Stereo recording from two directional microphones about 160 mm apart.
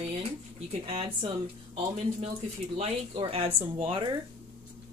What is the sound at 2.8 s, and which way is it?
Speech, 35° right (ahead or behind).